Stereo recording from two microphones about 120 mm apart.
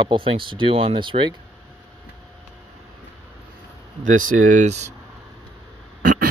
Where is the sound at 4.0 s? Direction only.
90° right; by 4.9 s 70° right (ahead or behind).